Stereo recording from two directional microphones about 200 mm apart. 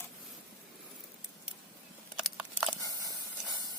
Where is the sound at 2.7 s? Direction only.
15° right (ahead or behind).